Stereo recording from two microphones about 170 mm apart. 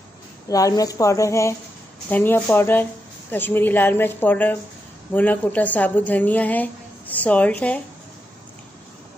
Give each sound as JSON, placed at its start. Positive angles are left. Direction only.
{"t": 0.5, "sound": "a woman's voice", "side_deg": 20}